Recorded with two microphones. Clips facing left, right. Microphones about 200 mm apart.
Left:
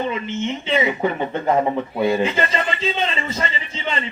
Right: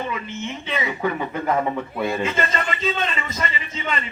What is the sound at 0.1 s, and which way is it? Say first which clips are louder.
Speech: left 5 dB; 25° left (ahead or behind).